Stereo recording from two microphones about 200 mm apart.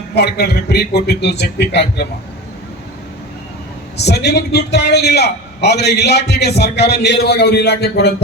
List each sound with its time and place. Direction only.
0.1 s a man's voice: 55° left (ahead or behind)
3.9 s a man's voice: 55° left (ahead or behind)